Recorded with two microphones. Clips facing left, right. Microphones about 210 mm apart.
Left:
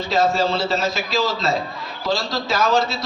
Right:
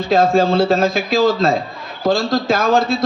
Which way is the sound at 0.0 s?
55° right (ahead or behind).